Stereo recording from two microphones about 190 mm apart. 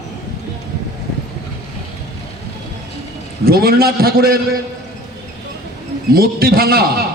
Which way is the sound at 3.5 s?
55° right (ahead or behind).